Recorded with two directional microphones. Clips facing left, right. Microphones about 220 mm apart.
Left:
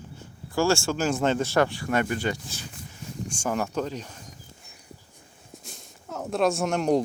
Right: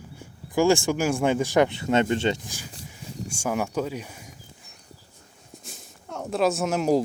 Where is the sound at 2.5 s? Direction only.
10° right (ahead or behind).